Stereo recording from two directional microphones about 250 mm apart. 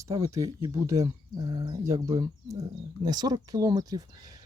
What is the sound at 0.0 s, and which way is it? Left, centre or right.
Speech, centre.